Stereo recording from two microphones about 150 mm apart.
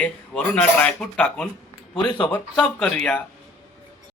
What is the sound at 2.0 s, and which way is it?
Speech, 30° left (ahead or behind).